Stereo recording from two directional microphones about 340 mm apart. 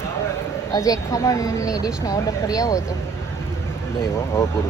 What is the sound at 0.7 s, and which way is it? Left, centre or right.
Speech, centre.